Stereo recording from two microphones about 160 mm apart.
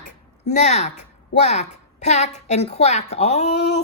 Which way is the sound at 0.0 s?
50° left (ahead or behind).